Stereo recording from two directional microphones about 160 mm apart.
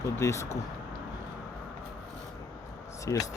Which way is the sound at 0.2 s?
15° left (ahead or behind).